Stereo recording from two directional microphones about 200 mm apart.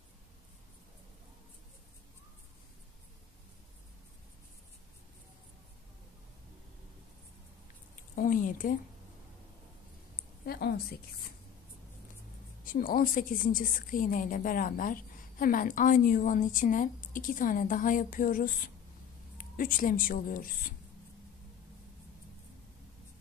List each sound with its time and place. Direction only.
8.2 s speech: 40° left (ahead or behind)
10.4 s a woman's voice: 50° left (ahead or behind)
12.6 s a woman's voice: 45° left (ahead or behind)